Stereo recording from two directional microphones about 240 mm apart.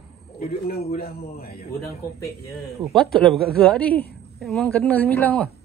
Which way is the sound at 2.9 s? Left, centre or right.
Centre.